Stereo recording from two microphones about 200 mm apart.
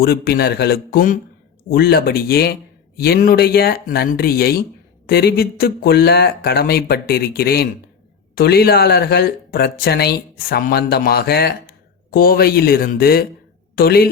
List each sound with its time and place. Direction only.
0.0 s speech: 50° left (ahead or behind)